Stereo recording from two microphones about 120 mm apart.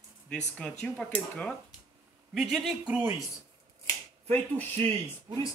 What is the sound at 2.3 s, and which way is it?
Speech, centre (ahead or behind).